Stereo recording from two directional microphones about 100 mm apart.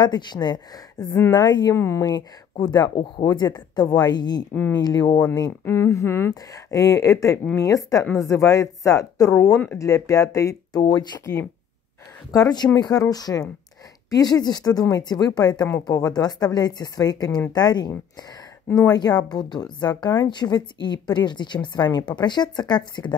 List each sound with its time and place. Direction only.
0.0 s speech: 45° left (ahead or behind)
1.8 s speech: 30° left (ahead or behind)
2.6 s speech: 45° left (ahead or behind)
5.7 s speech: 30° left (ahead or behind)
6.5 s speech: 35° left (ahead or behind)